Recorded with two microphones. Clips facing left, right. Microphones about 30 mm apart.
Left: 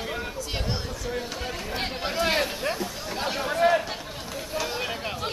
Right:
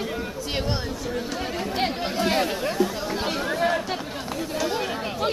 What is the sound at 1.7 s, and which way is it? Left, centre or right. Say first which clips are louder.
Chatter: right 2 dB; centre.